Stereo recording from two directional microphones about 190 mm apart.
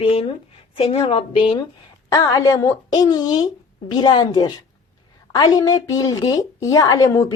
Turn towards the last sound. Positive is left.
turn(degrees=15)  # may be behind; listen again after turning